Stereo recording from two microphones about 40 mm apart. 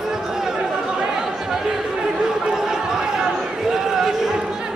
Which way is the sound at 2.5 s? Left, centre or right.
Centre.